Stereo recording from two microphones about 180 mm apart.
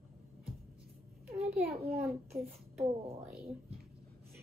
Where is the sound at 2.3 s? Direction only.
35° right (ahead or behind).